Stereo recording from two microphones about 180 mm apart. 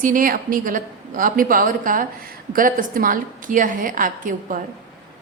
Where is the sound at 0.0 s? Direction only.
50° right (ahead or behind).